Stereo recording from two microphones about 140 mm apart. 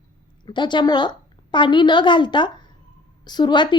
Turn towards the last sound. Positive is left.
turn(degrees=35)  # may be behind; listen again after turning